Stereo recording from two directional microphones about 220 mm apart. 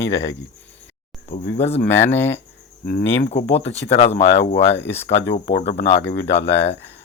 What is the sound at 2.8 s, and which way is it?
Speech, 45° left (ahead or behind).